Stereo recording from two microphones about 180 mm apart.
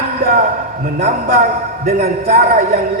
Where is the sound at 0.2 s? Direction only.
55° right (ahead or behind).